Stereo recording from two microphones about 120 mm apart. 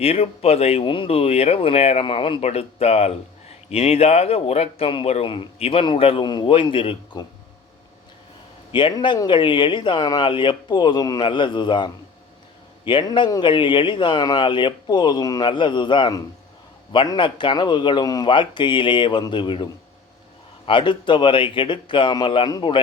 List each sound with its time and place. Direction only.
0.0 s speech: 55° left (ahead or behind)
8.7 s speech: 40° left (ahead or behind)
20.7 s speech: 45° left (ahead or behind)